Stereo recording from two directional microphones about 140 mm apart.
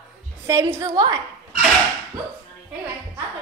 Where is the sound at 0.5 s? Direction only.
20° right (ahead or behind).